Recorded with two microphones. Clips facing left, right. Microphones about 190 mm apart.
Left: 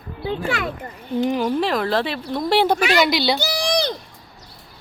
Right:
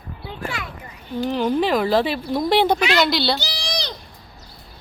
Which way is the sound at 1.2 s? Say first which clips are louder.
Left 2 dB; 10° left (ahead or behind).